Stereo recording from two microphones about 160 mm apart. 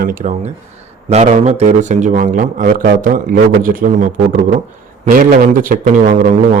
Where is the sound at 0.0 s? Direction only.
60° right (ahead or behind).